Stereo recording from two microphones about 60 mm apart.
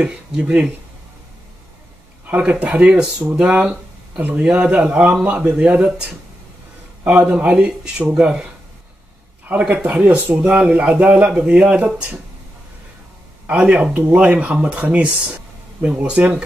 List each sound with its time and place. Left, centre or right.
0.0 s speech: centre
2.2 s speech: right
7.1 s speech: right
9.5 s speech: right
13.5 s speech: right